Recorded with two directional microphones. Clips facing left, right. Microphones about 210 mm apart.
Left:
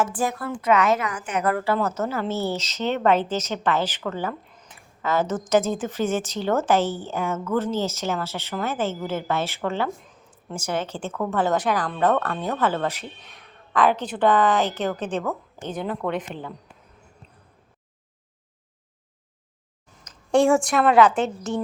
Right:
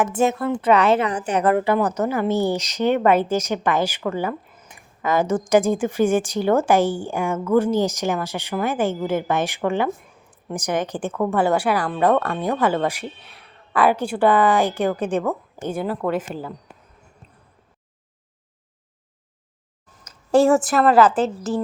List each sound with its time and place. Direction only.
0.0 s a woman's voice: 25° right (ahead or behind)
1.5 s speech: 15° right (ahead or behind)
19.9 s a woman's voice: 5° right (ahead or behind)